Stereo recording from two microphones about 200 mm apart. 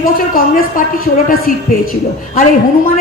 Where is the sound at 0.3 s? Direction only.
45° left (ahead or behind).